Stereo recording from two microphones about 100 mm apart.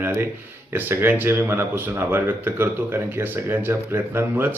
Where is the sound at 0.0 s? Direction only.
20° right (ahead or behind).